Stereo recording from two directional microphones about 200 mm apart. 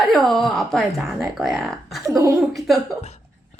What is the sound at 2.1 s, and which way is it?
Chuckle, 15° right (ahead or behind).